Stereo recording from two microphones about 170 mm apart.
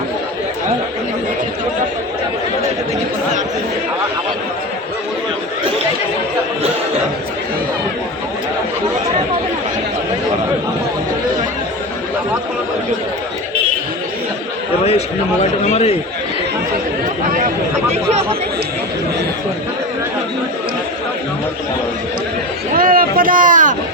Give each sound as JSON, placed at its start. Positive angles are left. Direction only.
{"t": 14.8, "sound": "a sound", "side_deg": 40}
{"t": 15.7, "sound": "a man's voice", "side_deg": 40}
{"t": 22.7, "sound": "boat", "side_deg": -55}